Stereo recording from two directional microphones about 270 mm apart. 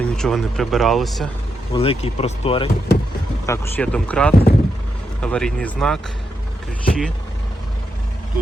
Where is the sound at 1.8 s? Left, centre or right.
Left.